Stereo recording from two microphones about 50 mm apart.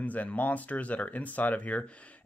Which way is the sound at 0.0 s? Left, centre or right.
Left.